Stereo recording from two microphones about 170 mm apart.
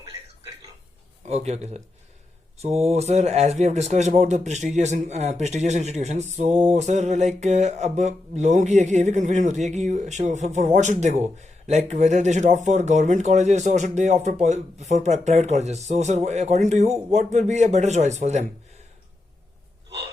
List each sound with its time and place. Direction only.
1.3 s a man's voice: 40° right (ahead or behind)